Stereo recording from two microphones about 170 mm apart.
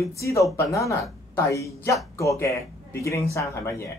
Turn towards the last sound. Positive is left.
turn(degrees=15)  # may be behind; listen again after turning